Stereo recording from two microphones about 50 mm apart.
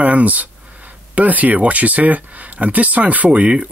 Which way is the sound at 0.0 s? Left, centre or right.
Right.